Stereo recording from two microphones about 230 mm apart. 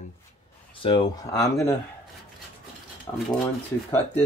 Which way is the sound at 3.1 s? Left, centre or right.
Centre.